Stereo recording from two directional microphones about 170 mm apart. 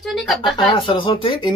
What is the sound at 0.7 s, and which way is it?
Speech, 30° left (ahead or behind).